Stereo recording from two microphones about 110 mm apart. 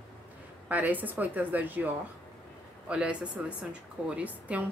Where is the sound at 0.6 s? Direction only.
15° right (ahead or behind).